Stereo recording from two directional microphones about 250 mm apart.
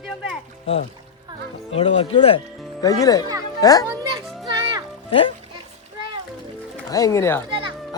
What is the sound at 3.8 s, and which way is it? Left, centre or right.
Children playing, centre.